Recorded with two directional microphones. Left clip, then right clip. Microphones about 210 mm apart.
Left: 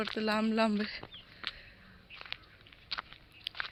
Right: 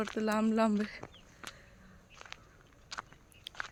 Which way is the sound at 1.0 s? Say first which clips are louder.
Left 6 dB; 5° left (ahead or behind).